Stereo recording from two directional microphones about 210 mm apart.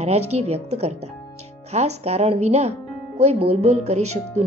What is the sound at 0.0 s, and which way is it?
Speech, 30° right (ahead or behind).